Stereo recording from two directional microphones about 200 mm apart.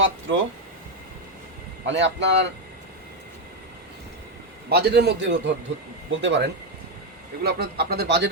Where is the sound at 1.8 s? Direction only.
60° right (ahead or behind).